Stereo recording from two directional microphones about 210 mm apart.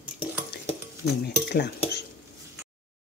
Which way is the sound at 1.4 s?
50° left (ahead or behind).